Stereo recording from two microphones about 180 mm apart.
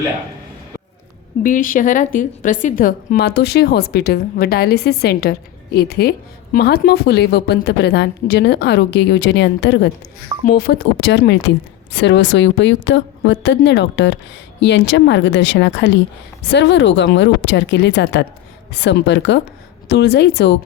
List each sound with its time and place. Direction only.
1.4 s a woman's voice: 50° left (ahead or behind); by 9.9 s 70° left (ahead or behind)
10.4 s a woman's voice: 60° left (ahead or behind); by 19.4 s 80° left
19.9 s a woman's voice: 70° left (ahead or behind)